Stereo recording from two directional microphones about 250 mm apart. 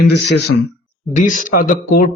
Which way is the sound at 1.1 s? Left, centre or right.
Left.